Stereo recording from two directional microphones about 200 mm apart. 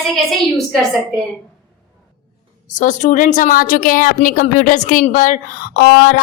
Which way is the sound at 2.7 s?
40° left (ahead or behind).